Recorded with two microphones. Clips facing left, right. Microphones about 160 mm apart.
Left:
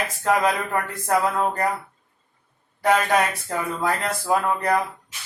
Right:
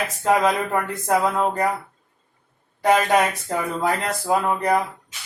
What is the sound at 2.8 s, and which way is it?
Speech, 15° right (ahead or behind).